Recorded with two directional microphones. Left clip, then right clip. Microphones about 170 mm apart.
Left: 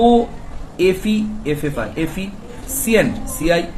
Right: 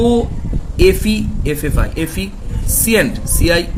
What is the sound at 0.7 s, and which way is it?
Speech, 90° right.